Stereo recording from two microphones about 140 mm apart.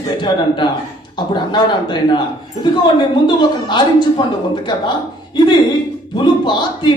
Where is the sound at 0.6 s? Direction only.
30° left (ahead or behind).